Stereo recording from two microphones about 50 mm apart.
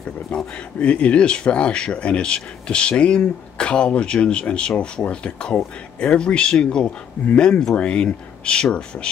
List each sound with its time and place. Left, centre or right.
0.6 s speech: left